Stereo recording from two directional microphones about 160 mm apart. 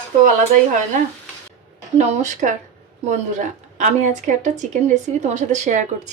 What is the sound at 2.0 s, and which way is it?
A woman's voice, 45° right (ahead or behind).